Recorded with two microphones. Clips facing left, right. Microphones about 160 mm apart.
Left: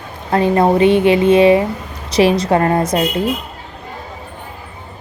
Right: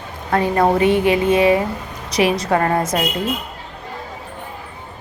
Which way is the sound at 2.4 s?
30° left (ahead or behind).